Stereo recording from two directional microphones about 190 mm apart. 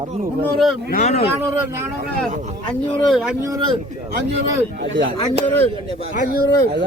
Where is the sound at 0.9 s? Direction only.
40° left (ahead or behind).